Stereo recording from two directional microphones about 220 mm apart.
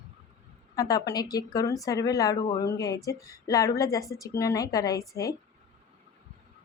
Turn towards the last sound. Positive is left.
turn(degrees=15)  # may be behind; listen again after turning